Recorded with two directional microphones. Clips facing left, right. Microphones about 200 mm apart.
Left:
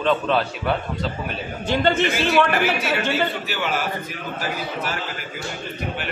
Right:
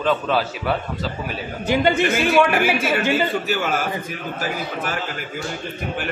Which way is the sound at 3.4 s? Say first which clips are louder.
Right 4 dB; 45° right (ahead or behind).